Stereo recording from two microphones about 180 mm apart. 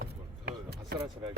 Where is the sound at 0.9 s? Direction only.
65° right (ahead or behind).